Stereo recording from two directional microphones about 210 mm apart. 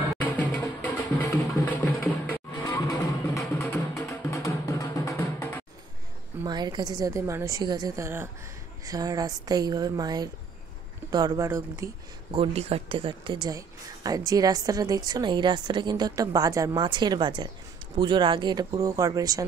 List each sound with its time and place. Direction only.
0.2 s music: 5° left (ahead or behind)
6.4 s a woman's voice: 20° right (ahead or behind)